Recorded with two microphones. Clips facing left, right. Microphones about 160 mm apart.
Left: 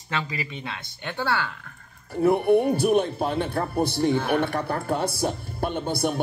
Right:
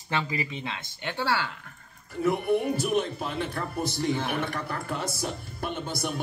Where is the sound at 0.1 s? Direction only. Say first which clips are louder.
Even; 25° right (ahead or behind).